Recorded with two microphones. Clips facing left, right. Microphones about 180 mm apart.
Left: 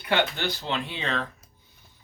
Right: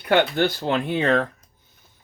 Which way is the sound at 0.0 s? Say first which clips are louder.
Right 7 dB; 50° right (ahead or behind).